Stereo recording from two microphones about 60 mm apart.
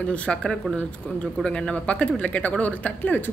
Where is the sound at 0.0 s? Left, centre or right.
Left.